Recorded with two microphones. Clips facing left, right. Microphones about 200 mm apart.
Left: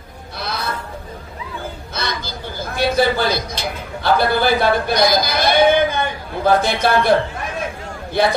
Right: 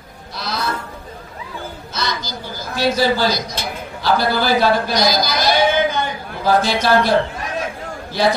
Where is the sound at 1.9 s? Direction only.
55° left (ahead or behind).